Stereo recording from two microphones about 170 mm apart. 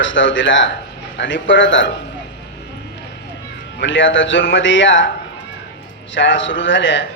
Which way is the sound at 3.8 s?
90° left.